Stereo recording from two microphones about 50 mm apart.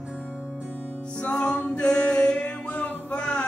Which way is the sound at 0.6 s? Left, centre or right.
Right.